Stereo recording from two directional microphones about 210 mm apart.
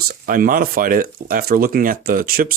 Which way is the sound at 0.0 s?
45° right (ahead or behind).